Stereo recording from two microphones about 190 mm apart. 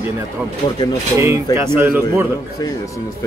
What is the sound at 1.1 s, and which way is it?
Speech, 15° right (ahead or behind).